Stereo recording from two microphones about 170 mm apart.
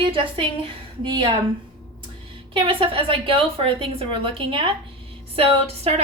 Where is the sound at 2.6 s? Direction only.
30° right (ahead or behind).